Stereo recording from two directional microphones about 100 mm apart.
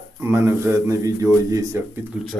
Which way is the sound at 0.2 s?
25° right (ahead or behind).